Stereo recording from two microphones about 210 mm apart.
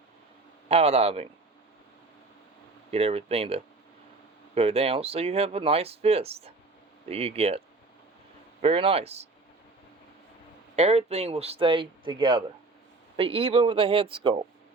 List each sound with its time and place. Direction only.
0.7 s speech: 30° right (ahead or behind)
2.9 s speech: 30° right (ahead or behind)
8.6 s speech: 25° right (ahead or behind)
10.8 s speech: 30° right (ahead or behind)